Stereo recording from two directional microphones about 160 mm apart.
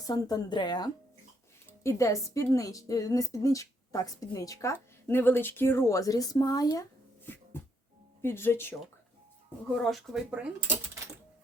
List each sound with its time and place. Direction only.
0.0 s a woman's voice: 25° left (ahead or behind)
8.2 s speech: 15° left (ahead or behind)
9.8 s speech: centre (ahead or behind)